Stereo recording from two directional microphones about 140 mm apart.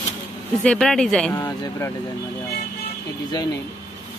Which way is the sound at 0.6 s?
5° left (ahead or behind).